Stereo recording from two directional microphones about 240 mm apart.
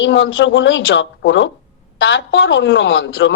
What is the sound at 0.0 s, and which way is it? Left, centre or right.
Speech, left.